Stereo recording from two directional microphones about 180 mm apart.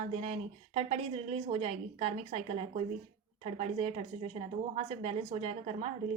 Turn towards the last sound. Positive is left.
turn(degrees=-35)  # may be behind; listen again after turning